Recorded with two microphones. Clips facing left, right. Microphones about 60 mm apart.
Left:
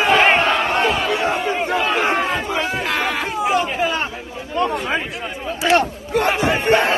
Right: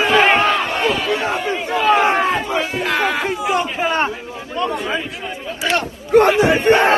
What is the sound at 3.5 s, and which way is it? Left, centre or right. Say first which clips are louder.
Speech: right 1 dB; right.